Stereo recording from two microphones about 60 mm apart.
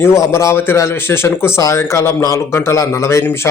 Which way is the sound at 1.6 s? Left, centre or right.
Left.